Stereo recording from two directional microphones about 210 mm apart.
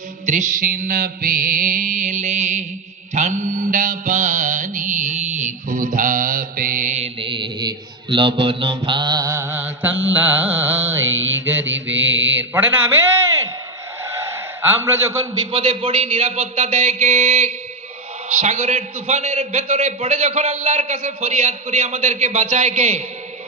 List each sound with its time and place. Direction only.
0.3 s a man's voice: 35° right (ahead or behind)
3.2 s mantra: 35° right (ahead or behind); by 11.0 s 10° right (ahead or behind)
11.0 s mantra: 70° right (ahead or behind)
12.4 s a sound: 10° right (ahead or behind)
14.7 s a man's voice: 10° right (ahead or behind)
15.5 s a sound: 25° right (ahead or behind)
18.3 s a man's voice: 35° right (ahead or behind)